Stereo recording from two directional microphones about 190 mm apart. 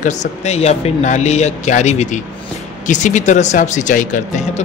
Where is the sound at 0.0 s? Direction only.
40° left (ahead or behind).